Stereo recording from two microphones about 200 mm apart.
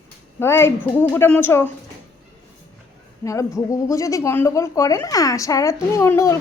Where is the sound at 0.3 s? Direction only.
10° left (ahead or behind).